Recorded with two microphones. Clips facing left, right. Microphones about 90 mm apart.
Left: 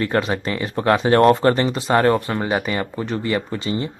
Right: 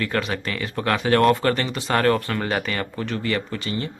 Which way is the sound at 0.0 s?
25° left (ahead or behind).